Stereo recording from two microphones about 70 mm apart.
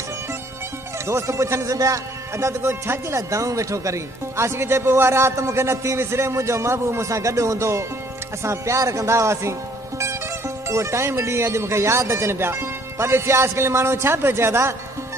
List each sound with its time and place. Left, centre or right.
1.0 s speech: right
3.2 s speech: right